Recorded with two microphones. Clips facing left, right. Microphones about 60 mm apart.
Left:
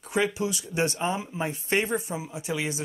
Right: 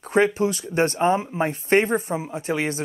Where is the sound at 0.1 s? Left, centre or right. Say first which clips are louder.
Right 7 dB; right.